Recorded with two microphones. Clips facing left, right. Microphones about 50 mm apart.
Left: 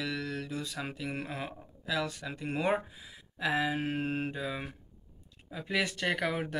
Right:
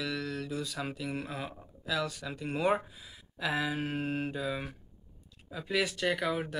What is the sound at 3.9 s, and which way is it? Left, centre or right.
Mantra, centre.